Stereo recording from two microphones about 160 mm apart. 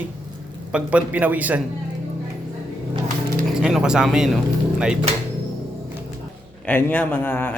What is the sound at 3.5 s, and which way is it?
Speech, 5° right (ahead or behind).